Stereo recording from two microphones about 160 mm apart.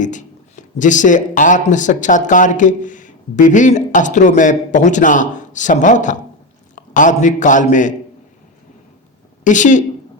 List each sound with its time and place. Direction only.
0.0 s a man's voice: 50° left (ahead or behind)
9.4 s speech: 50° left (ahead or behind)